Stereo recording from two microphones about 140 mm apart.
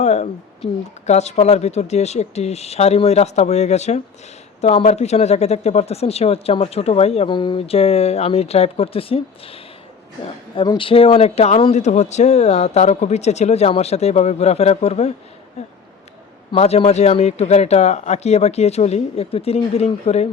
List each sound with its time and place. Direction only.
0.0 s speech: 50° left (ahead or behind)
7.3 s speech: 35° left (ahead or behind)
10.5 s speech: 40° left (ahead or behind)